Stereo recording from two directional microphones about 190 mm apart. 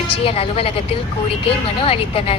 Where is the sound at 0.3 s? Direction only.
30° left (ahead or behind).